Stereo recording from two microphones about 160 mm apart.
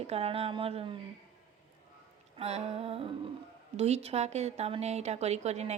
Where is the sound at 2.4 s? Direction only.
40° right (ahead or behind).